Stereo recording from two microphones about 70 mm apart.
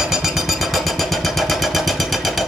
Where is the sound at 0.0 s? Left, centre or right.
Centre.